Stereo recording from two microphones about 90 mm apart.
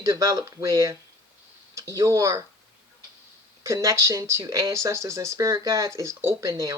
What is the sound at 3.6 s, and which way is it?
Speech, 40° right (ahead or behind).